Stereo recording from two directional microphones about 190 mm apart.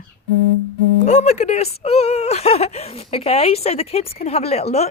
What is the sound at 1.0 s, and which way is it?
A woman's voice, 35° left (ahead or behind).